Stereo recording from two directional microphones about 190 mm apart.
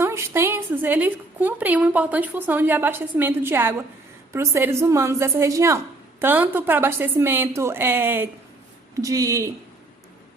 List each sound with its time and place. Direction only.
0.0 s a woman's voice: 15° right (ahead or behind)